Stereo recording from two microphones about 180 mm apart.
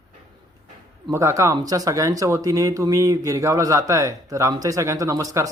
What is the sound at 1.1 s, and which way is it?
Speech, 15° right (ahead or behind).